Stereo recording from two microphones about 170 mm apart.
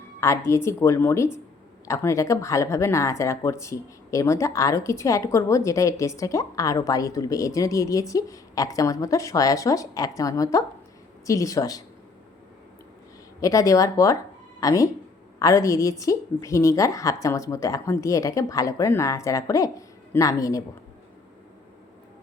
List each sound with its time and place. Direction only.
0.2 s a woman's voice: 15° left (ahead or behind)
13.4 s speech: 20° left (ahead or behind)